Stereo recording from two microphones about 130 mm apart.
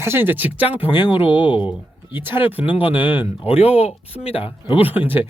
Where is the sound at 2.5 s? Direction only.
15° right (ahead or behind).